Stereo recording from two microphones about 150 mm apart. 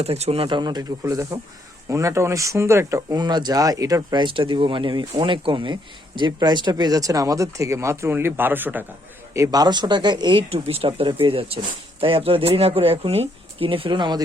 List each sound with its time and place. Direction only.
0.0 s speech: 45° right (ahead or behind)